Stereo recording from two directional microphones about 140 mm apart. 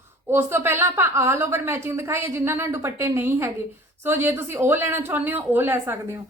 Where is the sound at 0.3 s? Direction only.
15° right (ahead or behind).